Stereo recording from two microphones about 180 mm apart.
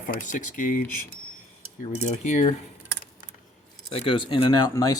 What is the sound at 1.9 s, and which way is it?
Cutlery, 40° left (ahead or behind).